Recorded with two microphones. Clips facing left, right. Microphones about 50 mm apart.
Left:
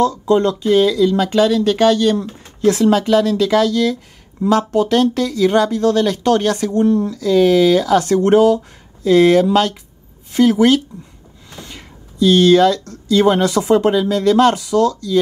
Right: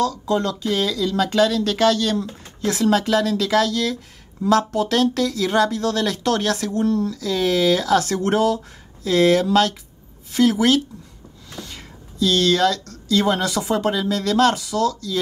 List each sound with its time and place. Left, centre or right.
0.3 s speech: left
2.8 s speech: centre
11.5 s a sound: left
12.8 s speech: left